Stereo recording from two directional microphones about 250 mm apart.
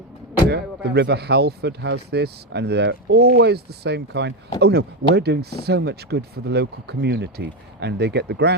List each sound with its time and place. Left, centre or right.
0.5 s speech: right